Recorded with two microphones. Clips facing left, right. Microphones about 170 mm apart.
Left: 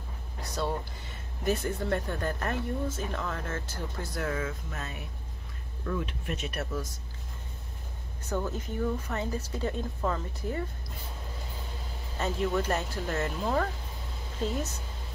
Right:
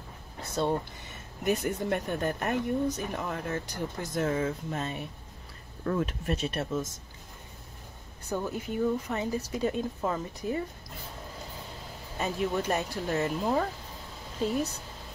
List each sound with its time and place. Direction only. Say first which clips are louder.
0.4 s a sound: right 4 dB; 25° right (ahead or behind)
1.4 s speech: right 1 dB; 15° right (ahead or behind)
5.9 s speech: right 4 dB; 45° right (ahead or behind); by 6.9 s 25° right (ahead or behind)
8.3 s speech: right 1 dB; 15° right (ahead or behind)
12.2 s speech: left 1 dB; 15° right (ahead or behind)